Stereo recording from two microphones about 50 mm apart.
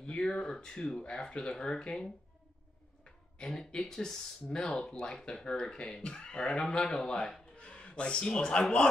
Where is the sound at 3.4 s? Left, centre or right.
Centre.